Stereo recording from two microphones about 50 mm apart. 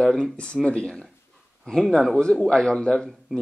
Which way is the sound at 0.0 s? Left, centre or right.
Centre.